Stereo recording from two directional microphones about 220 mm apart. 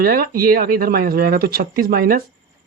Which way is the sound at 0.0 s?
40° right (ahead or behind).